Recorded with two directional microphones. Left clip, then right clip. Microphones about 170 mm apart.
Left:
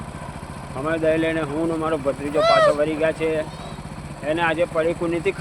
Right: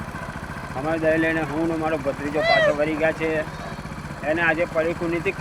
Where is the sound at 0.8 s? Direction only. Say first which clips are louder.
Left 1 dB; 25° left (ahead or behind).